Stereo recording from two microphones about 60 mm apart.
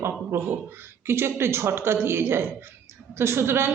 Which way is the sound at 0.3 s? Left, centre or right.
Right.